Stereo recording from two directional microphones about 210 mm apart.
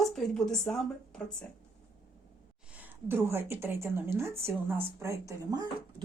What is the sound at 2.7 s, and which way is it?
Speech, 10° right (ahead or behind).